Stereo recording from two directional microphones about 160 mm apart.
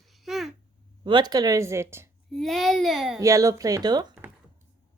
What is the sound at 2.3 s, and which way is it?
Speech, centre (ahead or behind).